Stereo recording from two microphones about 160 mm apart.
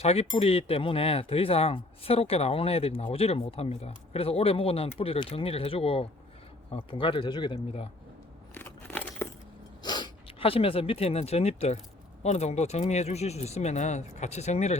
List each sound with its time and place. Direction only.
0.0 s speech: 40° left (ahead or behind)
8.5 s a sound: 10° left (ahead or behind)
9.8 s speech: 25° left (ahead or behind); by 14.8 s 45° left (ahead or behind)